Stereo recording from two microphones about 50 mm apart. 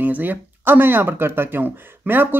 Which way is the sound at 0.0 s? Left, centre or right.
Right.